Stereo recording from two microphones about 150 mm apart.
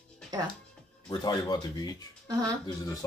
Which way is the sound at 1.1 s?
25° left (ahead or behind).